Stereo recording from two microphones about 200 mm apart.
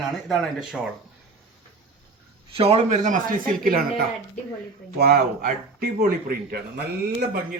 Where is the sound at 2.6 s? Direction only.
30° right (ahead or behind).